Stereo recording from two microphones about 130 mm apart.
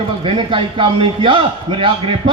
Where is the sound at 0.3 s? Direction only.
40° right (ahead or behind).